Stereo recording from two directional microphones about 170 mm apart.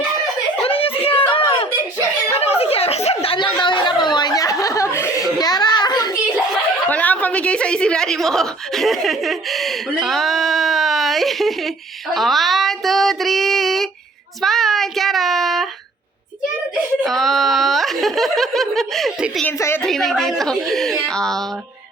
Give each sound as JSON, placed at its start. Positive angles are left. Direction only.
{"t": 0.6, "sound": "a sound", "side_deg": 35}
{"t": 6.8, "sound": "a woman's voice", "side_deg": 10}
{"t": 12.1, "sound": "child singing", "side_deg": 0}
{"t": 17.0, "sound": "giggle", "side_deg": 0}
{"t": 19.5, "sound": "a woman's voice", "side_deg": 15}
{"t": 19.8, "sound": "child singing", "side_deg": 0}